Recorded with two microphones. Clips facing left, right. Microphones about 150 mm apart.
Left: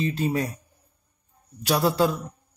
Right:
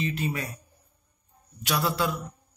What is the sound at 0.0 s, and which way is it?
Speech, 35° left (ahead or behind).